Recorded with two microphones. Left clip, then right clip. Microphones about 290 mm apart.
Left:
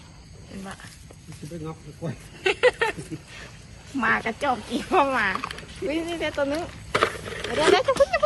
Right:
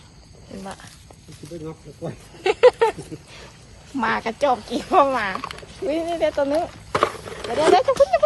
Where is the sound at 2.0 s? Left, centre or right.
Right.